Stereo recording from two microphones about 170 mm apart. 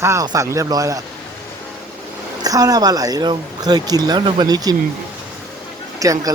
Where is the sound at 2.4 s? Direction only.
20° right (ahead or behind).